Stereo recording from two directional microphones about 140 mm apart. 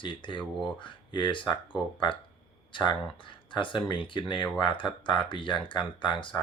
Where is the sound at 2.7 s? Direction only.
35° left (ahead or behind).